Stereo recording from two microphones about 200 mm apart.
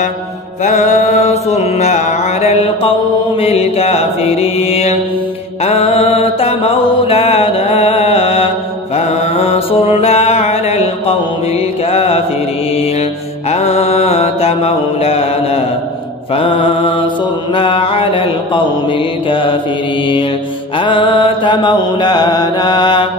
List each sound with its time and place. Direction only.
0.7 s mantra: 35° left (ahead or behind)
13.5 s mantra: 30° left (ahead or behind)
20.7 s mantra: 25° left (ahead or behind)